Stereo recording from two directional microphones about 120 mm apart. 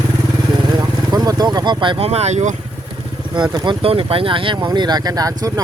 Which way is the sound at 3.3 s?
40° right (ahead or behind).